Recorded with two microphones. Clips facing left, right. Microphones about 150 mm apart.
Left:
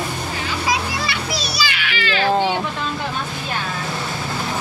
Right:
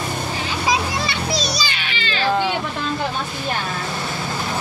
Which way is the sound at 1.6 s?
30° right (ahead or behind).